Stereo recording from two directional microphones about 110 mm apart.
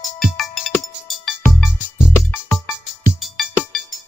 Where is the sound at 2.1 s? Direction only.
20° left (ahead or behind).